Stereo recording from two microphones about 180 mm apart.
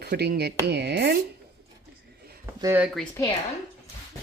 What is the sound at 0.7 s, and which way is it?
Chopping, 70° right (ahead or behind).